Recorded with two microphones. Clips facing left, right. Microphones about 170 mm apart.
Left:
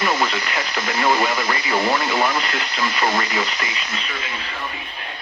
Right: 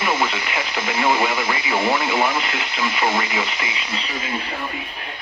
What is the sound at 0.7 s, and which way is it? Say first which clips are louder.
Speech: even; 25° right (ahead or behind).